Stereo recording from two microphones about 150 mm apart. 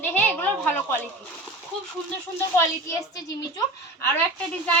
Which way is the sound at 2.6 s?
20° left (ahead or behind).